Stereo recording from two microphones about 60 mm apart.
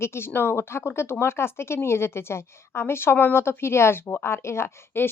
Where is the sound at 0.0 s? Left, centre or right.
Left.